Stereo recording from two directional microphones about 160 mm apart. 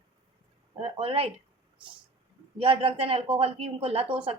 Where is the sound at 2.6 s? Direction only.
35° right (ahead or behind).